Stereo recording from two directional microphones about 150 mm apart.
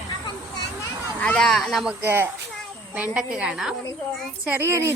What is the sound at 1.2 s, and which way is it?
Speech, 5° left (ahead or behind).